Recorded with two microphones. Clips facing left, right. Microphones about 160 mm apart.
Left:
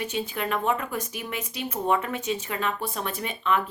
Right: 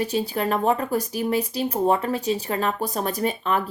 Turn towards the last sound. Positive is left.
turn(degrees=-40)  # may be behind; listen again after turning